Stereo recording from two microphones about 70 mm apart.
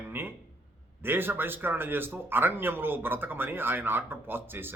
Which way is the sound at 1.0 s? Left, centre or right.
Right.